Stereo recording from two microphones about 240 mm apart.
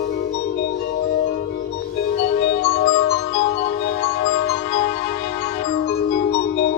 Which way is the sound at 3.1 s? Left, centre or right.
Left.